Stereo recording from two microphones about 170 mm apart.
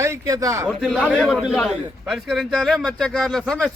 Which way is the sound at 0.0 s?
20° right (ahead or behind).